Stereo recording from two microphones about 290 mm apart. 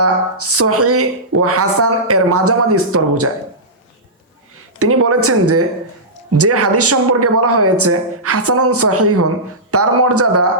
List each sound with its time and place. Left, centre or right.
0.0 s speech: right
4.8 s speech: right